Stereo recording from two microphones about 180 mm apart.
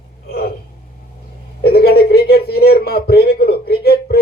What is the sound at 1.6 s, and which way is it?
A man's voice, 60° left (ahead or behind).